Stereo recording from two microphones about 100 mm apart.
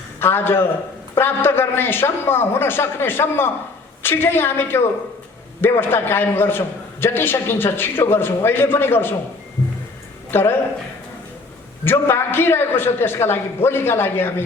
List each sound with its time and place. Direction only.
0.2 s a man's voice: 20° left (ahead or behind)
10.3 s a man's voice: 20° left (ahead or behind)
11.9 s a man's voice: 25° left (ahead or behind)